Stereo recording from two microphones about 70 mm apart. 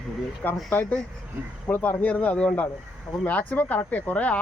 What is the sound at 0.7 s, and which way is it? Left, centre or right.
Speech, left.